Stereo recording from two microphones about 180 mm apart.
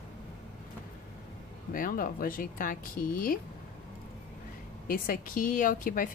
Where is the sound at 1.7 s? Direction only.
50° left (ahead or behind).